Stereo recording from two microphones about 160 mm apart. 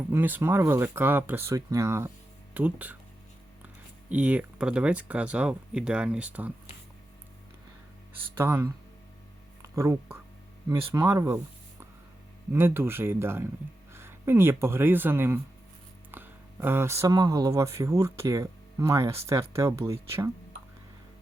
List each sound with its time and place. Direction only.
0.1 s speech: 10° right (ahead or behind)
4.1 s speech: 10° right (ahead or behind)
8.4 s speech: 15° right (ahead or behind)
9.7 s speech: 20° right (ahead or behind)
12.5 s speech: 15° right (ahead or behind)